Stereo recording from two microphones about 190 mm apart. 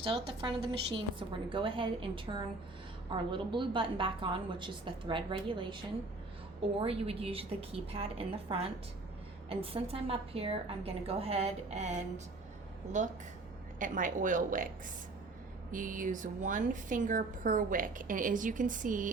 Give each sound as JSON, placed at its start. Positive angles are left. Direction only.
{"t": 0.0, "sound": "a woman's voice", "side_deg": -30}
{"t": 15.7, "sound": "a woman's voice", "side_deg": -45}